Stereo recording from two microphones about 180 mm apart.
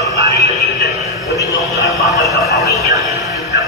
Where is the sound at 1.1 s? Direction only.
20° right (ahead or behind).